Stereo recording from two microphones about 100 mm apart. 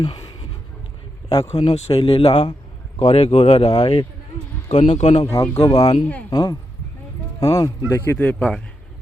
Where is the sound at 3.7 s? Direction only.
60° left (ahead or behind).